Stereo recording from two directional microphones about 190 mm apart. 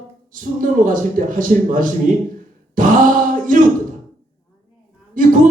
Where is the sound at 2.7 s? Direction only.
45° right (ahead or behind).